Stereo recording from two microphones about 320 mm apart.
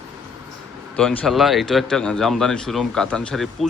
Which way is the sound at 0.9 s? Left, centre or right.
Centre.